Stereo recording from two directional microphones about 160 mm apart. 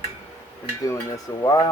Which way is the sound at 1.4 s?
20° left (ahead or behind).